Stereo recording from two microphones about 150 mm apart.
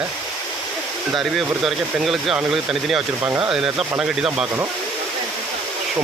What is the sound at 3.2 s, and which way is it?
Speech, 15° right (ahead or behind).